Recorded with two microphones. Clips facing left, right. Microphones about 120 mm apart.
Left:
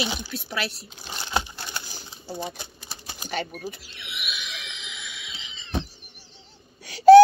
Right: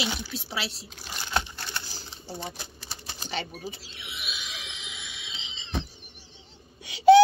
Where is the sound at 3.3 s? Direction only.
50° left (ahead or behind).